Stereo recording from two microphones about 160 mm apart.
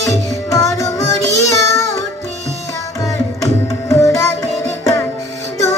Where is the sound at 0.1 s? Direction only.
20° left (ahead or behind).